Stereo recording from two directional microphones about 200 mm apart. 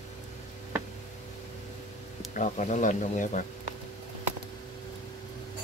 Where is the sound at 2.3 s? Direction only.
35° left (ahead or behind).